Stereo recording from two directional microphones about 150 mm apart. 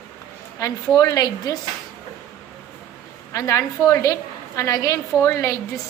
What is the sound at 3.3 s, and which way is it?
A woman's voice, 20° left (ahead or behind).